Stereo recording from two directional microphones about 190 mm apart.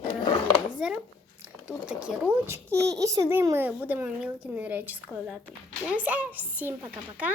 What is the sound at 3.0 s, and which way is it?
A child's voice, 15° right (ahead or behind).